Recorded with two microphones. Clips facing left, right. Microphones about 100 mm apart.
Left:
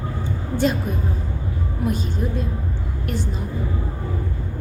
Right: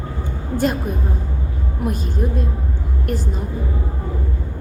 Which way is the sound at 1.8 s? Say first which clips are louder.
Right 1 dB; 50° right (ahead or behind).